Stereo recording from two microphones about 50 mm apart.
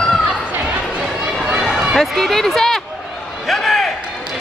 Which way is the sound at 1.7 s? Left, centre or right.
Centre.